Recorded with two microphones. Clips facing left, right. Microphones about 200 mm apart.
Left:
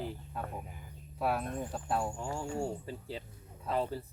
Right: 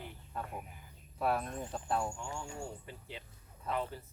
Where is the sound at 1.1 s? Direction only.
5° left (ahead or behind).